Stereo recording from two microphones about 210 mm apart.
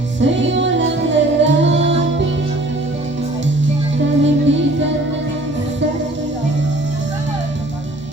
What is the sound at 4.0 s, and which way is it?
Music, 60° right (ahead or behind).